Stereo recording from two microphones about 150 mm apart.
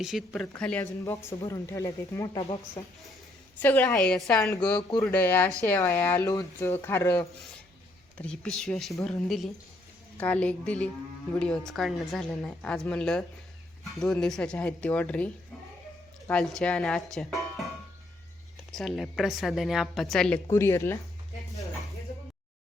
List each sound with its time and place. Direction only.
0.0 s a woman's voice: centre (ahead or behind)
0.8 s speech: 20° left (ahead or behind)
3.6 s speech: 10° left (ahead or behind)
8.2 s a woman's voice: 5° left (ahead or behind)
16.3 s a woman's voice: 5° left (ahead or behind)
18.7 s a woman's voice: centre (ahead or behind)
20.5 s speech: 15° left (ahead or behind)